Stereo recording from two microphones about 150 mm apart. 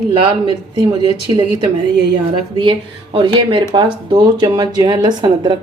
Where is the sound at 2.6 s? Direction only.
30° right (ahead or behind).